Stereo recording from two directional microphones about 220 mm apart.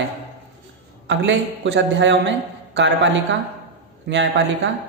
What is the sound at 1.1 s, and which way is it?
A woman's voice, 55° right (ahead or behind).